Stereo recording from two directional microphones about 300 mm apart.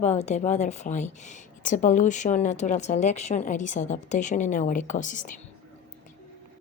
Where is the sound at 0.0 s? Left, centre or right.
Left.